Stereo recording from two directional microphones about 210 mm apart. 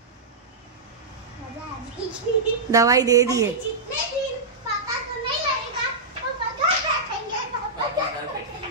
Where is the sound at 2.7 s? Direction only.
15° right (ahead or behind).